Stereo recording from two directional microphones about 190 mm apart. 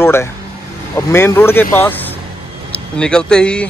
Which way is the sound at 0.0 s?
10° left (ahead or behind).